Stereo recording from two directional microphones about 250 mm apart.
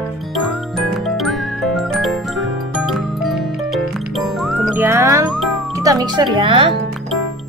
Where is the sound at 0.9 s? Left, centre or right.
Centre.